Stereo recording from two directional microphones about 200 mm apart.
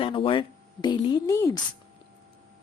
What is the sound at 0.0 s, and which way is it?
Speech, 25° left (ahead or behind).